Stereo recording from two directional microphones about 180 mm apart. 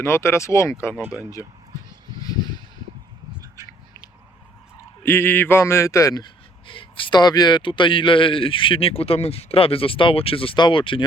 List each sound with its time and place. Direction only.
0.0 s speech: 15° left (ahead or behind)
2.2 s a sound: 20° left (ahead or behind)
4.8 s speech: 10° left (ahead or behind); by 11.0 s 30° left (ahead or behind)